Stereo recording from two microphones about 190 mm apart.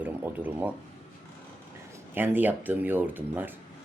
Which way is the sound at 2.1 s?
10° right (ahead or behind).